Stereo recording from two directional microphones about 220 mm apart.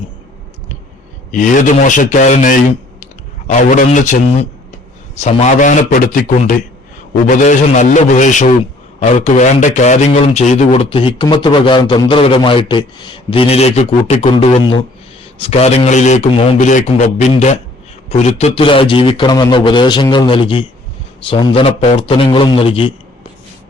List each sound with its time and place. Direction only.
1.3 s a man's voice: 35° left (ahead or behind)